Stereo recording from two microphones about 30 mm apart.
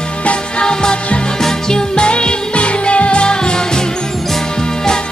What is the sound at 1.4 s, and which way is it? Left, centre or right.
Music, left.